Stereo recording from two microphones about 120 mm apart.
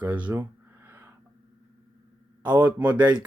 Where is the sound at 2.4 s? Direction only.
10° right (ahead or behind).